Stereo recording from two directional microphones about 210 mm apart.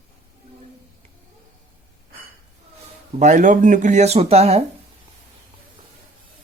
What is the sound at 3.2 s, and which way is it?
Speech, 35° right (ahead or behind).